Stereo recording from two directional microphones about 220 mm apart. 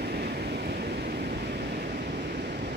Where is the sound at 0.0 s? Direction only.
45° right (ahead or behind).